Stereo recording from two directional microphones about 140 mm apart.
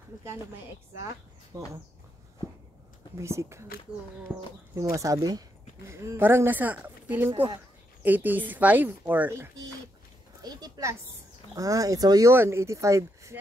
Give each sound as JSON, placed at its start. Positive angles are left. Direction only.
{"t": 1.5, "sound": "speech", "side_deg": -20}
{"t": 3.2, "sound": "speech", "side_deg": -20}
{"t": 4.7, "sound": "speech", "side_deg": -20}
{"t": 10.4, "sound": "a sound", "side_deg": -30}
{"t": 11.5, "sound": "speech", "side_deg": -25}